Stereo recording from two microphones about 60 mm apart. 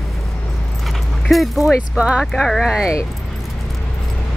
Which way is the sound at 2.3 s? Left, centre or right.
Centre.